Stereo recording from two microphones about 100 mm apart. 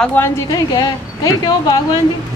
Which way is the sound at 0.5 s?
40° left (ahead or behind).